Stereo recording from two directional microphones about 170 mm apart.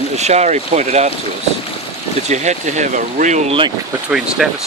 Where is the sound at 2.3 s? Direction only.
45° right (ahead or behind).